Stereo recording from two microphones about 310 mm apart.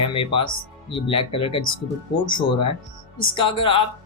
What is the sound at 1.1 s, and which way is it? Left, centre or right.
Speech, centre.